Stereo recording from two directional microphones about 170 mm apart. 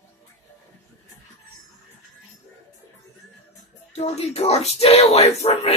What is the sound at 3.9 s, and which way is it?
Speech, 40° left (ahead or behind).